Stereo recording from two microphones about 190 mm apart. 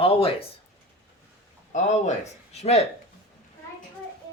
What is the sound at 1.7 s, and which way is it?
Speech, 40° left (ahead or behind).